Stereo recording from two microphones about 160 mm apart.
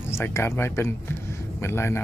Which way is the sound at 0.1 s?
15° left (ahead or behind).